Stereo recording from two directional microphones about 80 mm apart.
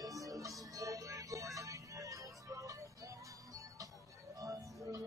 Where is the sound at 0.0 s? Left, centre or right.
Right.